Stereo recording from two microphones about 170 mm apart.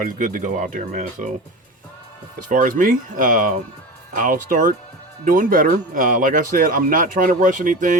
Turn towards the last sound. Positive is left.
turn(degrees=-50)  # may be behind; listen again after turning